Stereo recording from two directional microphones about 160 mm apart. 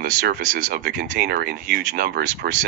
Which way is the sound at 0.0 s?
60° right (ahead or behind).